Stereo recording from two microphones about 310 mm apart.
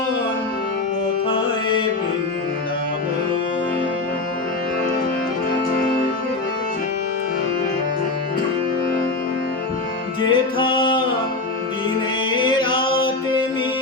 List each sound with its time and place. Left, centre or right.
10.2 s music: centre
12.4 s music: centre